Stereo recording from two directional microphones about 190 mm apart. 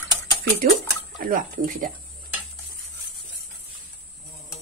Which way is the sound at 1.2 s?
45° right (ahead or behind).